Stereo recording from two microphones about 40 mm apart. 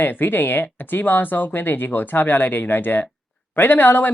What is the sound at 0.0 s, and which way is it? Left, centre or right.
Speech, left.